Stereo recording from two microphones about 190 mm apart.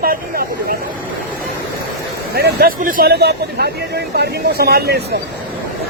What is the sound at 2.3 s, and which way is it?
A man's voice, 55° right (ahead or behind).